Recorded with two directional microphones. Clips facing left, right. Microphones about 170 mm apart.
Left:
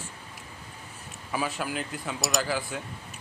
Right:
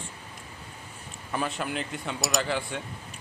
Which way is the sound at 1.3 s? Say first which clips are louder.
Even; centre (ahead or behind).